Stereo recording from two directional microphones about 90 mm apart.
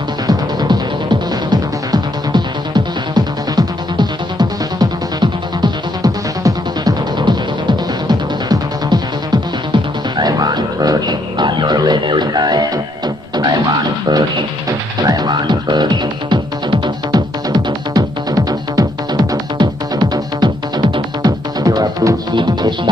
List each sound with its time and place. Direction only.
0.3 s music: 50° right (ahead or behind)
22.3 s music: 60° right (ahead or behind)